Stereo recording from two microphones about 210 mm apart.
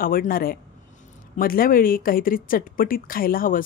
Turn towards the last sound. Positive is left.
turn(degrees=40)  # may be behind; listen again after turning